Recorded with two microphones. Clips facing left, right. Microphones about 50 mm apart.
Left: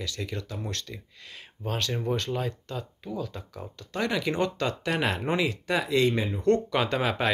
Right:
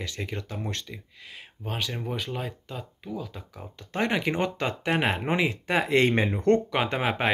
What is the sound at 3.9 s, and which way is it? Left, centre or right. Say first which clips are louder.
Speech: right 2 dB; right.